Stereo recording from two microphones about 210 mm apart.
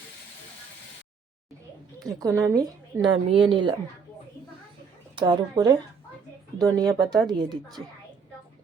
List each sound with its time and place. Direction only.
2.0 s a woman's voice: 15° right (ahead or behind)
5.1 s speech: 20° right (ahead or behind)